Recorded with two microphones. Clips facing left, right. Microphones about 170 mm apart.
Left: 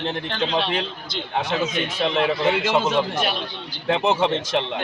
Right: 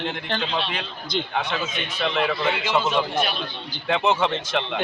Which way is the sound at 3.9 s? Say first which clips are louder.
Left 1 dB; 35° left (ahead or behind).